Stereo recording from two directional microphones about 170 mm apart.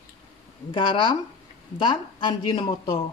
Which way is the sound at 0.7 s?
30° left (ahead or behind).